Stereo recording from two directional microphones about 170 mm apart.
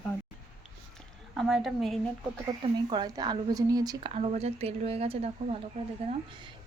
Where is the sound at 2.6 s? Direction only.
30° right (ahead or behind).